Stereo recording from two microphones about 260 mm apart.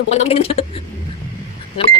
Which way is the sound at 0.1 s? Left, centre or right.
Left.